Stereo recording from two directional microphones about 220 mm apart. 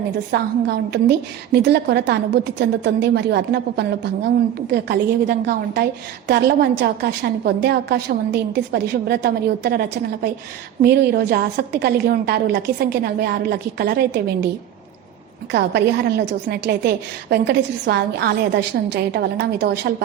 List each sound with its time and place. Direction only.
0.3 s a woman's voice: 50° right (ahead or behind)
10.8 s a woman's voice: 45° right (ahead or behind)
15.5 s a woman's voice: 50° right (ahead or behind)